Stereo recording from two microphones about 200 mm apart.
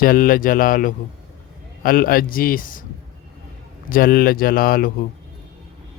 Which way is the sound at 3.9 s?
45° left (ahead or behind).